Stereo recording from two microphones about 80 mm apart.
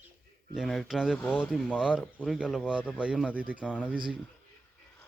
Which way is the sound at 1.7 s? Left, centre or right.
Centre.